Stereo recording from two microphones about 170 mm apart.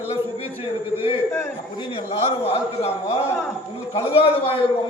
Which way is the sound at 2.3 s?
35° left (ahead or behind).